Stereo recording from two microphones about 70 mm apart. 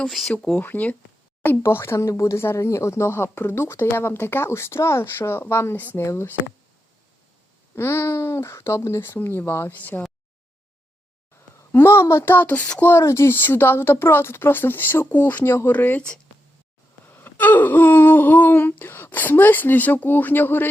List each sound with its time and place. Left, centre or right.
0.1 s speech: centre
0.3 s speech: centre
0.6 s a sound: left
1.6 s speech: left
7.8 s speech: left
9.7 s a sound: left
11.7 s speech: left
12.8 s speech: left
17.1 s a sound: left